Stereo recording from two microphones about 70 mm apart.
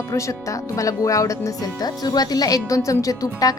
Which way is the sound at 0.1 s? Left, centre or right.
Left.